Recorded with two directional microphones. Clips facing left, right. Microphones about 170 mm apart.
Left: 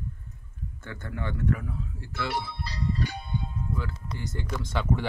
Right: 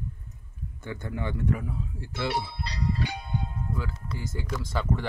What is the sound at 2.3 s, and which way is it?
Speech, 65° right (ahead or behind).